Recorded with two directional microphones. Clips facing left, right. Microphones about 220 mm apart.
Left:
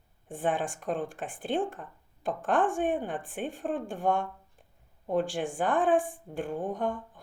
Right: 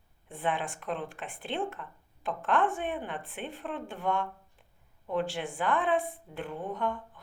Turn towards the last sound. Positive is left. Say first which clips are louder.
# left 3 dB
turn(degrees=45)  # may be behind; listen again after turning